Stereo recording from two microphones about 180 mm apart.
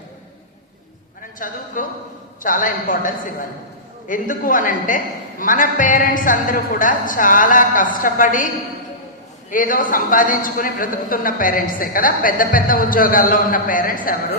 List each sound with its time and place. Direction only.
1.4 s a man's voice: 50° left (ahead or behind)